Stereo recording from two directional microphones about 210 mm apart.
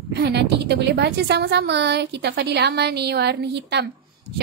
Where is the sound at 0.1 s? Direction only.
50° right (ahead or behind).